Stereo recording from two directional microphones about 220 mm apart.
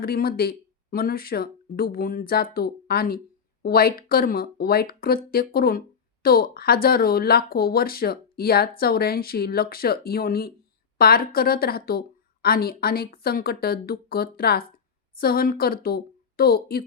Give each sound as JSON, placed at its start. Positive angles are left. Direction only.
{"t": 0.0, "sound": "a woman's voice", "side_deg": 45}